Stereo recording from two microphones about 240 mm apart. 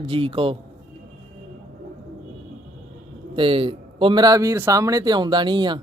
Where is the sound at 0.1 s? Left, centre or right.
Right.